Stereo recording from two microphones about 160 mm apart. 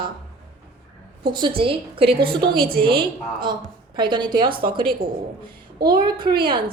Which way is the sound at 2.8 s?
30° right (ahead or behind).